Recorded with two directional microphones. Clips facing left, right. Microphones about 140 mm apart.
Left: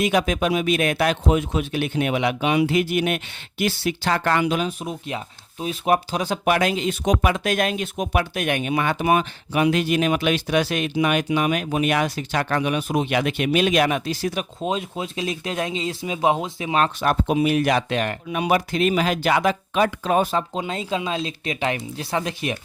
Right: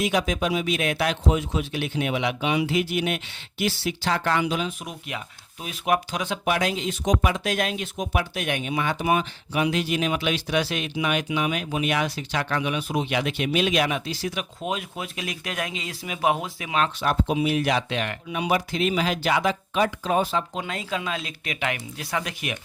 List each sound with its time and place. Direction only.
0.0 s speech: 55° left (ahead or behind)
4.8 s speech: 30° left (ahead or behind)
6.4 s speech: 60° left (ahead or behind)
14.6 s speech: 25° left (ahead or behind)
16.7 s speech: 45° left (ahead or behind); by 20.2 s 65° left (ahead or behind)
20.5 s speech: 25° left (ahead or behind)